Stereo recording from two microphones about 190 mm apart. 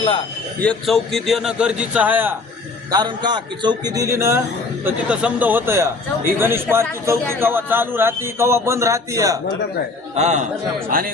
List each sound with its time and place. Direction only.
0.6 s a man's voice: 5° left (ahead or behind)
2.9 s a man's voice: 25° right (ahead or behind)
10.2 s a man's voice: 35° right (ahead or behind)